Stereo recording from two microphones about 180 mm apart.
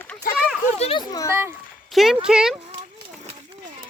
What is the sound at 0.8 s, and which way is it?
Speech, 30° left (ahead or behind).